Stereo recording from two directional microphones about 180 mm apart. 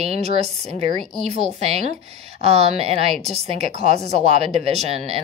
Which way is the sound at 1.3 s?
35° right (ahead or behind).